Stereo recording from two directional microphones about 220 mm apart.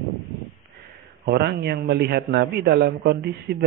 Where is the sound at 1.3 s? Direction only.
50° right (ahead or behind).